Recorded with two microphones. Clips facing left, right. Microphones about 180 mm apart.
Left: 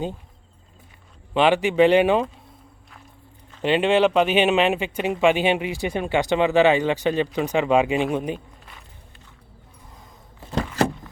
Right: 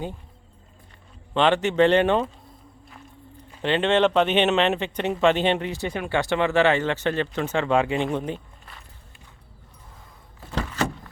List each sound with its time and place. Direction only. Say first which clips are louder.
1.3 s speech: left 2 dB; 10° left (ahead or behind)
3.6 s speech: left 2 dB; 10° left (ahead or behind)